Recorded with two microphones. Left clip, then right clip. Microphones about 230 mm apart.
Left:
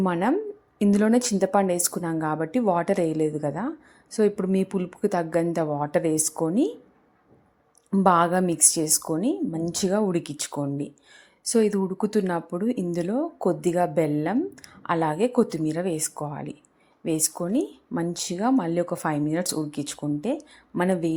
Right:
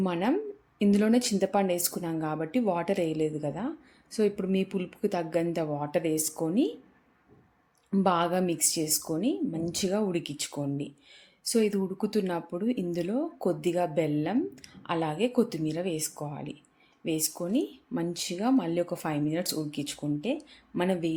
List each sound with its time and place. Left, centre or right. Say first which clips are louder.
0.0 s a woman's voice: left 5 dB; centre
7.9 s a woman's voice: left 6 dB; centre